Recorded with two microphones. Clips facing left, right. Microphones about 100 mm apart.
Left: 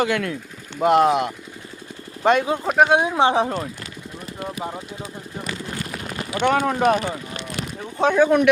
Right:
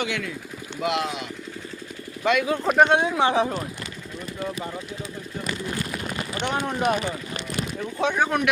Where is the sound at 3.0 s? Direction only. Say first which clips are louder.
Left 3 dB; 20° left (ahead or behind).